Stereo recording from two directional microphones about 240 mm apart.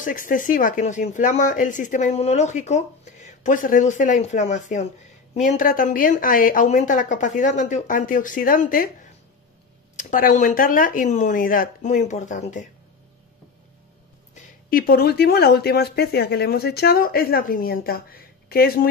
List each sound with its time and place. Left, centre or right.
0.0 s speech: left
9.9 s speech: left
14.3 s speech: left